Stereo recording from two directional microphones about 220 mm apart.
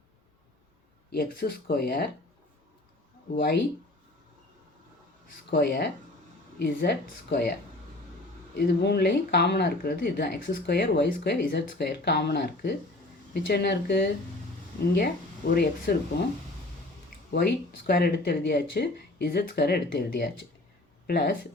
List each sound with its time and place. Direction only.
1.1 s speech: 45° left (ahead or behind)
3.3 s speech: 50° left (ahead or behind)
5.5 s speech: 50° left (ahead or behind)
8.5 s speech: 50° left (ahead or behind)
17.3 s speech: 45° left (ahead or behind)